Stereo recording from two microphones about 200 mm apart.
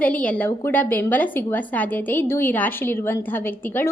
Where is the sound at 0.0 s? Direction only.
5° left (ahead or behind).